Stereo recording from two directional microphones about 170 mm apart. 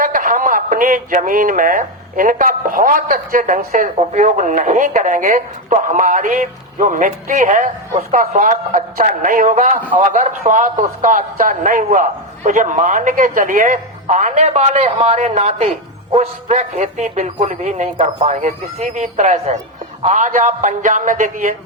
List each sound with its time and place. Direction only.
0.0 s speech: 55° right (ahead or behind)